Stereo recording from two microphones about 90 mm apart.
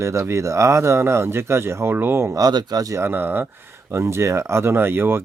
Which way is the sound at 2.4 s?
50° right (ahead or behind).